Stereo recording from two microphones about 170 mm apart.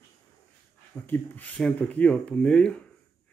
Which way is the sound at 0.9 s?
10° left (ahead or behind).